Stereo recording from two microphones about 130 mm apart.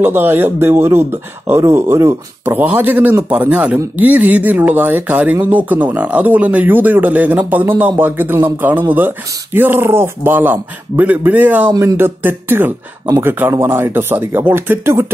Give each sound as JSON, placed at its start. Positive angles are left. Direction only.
{"t": 0.0, "sound": "speech", "side_deg": -15}